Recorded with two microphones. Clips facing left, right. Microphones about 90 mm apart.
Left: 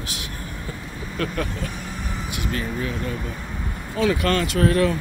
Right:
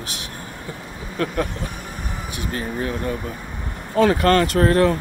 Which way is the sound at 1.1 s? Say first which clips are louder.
Right 3 dB; 35° right (ahead or behind).